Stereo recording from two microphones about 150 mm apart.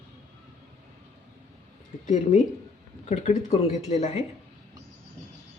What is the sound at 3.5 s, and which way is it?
Speech, 45° left (ahead or behind).